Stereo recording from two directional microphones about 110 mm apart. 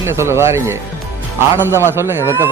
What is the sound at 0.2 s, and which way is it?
Speech, 25° right (ahead or behind).